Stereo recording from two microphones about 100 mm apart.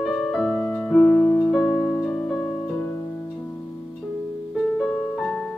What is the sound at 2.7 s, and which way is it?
Harp, 30° left (ahead or behind).